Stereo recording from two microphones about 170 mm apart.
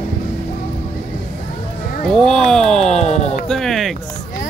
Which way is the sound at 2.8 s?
40° left (ahead or behind).